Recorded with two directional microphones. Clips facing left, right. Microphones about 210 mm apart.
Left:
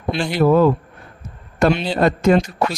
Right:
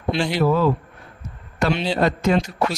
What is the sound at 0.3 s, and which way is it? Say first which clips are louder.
A man's voice: left 6 dB; 50° left (ahead or behind).